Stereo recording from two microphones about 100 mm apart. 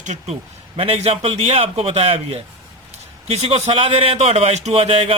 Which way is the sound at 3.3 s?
90° right.